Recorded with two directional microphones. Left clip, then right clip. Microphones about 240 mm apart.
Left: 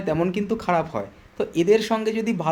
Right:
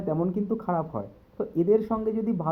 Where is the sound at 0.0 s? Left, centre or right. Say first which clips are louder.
Left 5 dB; centre.